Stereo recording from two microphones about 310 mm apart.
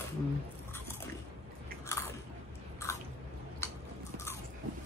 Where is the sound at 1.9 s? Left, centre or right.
Centre.